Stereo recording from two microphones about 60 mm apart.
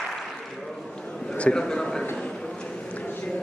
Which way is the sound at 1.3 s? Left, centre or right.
Centre.